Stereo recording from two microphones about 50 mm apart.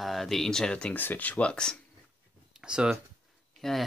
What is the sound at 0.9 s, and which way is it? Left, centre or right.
Speech, left.